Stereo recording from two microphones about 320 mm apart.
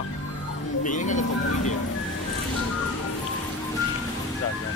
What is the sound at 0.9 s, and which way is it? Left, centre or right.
Speech, left.